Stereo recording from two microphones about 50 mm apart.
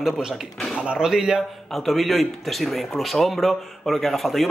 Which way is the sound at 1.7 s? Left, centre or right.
Centre.